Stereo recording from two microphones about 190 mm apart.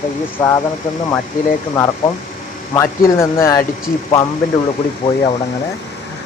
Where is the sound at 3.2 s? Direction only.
15° left (ahead or behind).